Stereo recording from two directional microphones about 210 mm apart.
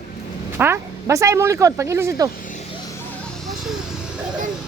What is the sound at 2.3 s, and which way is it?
Vehicle, 40° left (ahead or behind).